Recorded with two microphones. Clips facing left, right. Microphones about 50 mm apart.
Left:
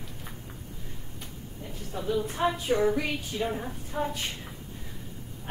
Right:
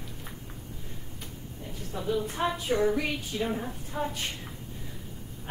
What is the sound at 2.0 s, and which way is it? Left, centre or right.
A woman's voice, centre.